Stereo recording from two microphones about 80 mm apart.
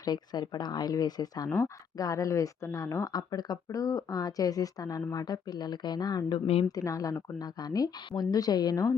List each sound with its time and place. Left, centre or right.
0.0 s speech: left
1.5 s speech: left
2.0 s speech: left